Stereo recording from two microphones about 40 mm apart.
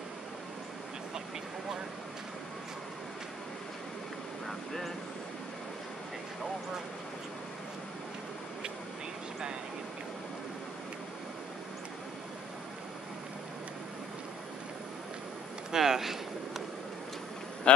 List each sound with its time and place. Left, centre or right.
4.5 s vehicle: centre
15.7 s a sound: centre
17.7 s speech: left